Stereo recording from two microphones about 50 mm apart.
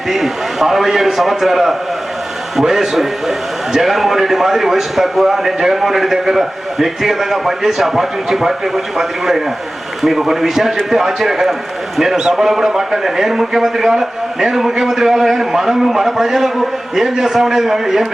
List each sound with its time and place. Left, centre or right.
0.1 s a man's voice: centre